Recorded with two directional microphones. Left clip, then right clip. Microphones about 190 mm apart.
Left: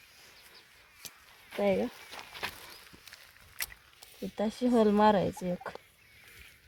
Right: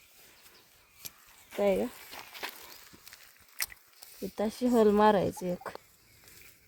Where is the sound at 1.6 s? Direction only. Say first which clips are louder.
Right 1 dB; 10° left (ahead or behind).